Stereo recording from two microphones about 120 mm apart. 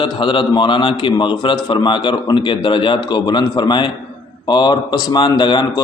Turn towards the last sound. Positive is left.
turn(degrees=40)  # may be behind; listen again after turning